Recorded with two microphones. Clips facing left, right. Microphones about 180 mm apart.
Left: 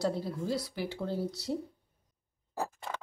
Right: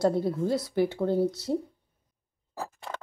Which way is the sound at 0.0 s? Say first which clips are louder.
Right 7 dB; 55° right (ahead or behind).